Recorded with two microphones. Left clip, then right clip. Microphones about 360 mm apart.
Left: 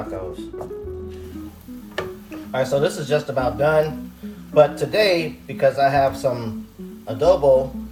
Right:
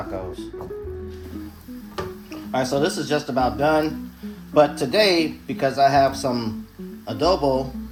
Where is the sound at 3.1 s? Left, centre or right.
Centre.